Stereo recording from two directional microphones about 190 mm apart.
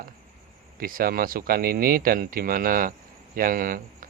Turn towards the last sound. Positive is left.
turn(degrees=-45)  # may be behind; listen again after turning